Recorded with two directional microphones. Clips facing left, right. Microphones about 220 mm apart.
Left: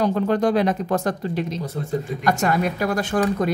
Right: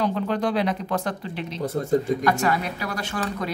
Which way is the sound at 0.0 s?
45° left (ahead or behind).